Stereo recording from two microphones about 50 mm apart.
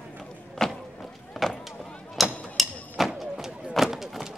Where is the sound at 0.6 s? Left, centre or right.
Centre.